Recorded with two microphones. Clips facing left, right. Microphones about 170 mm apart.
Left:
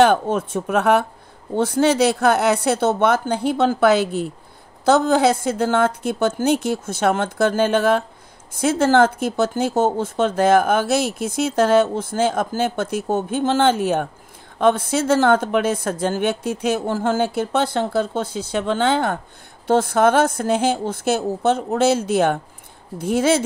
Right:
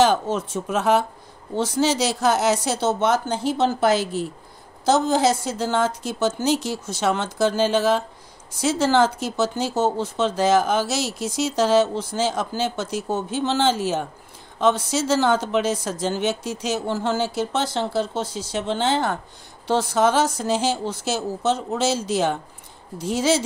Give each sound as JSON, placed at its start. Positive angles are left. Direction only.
{"t": 0.0, "sound": "speech", "side_deg": 55}